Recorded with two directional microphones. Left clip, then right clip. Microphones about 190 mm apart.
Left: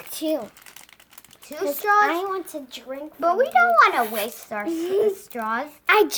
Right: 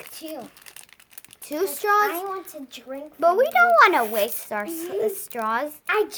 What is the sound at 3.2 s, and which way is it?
A child's voice, 50° right (ahead or behind).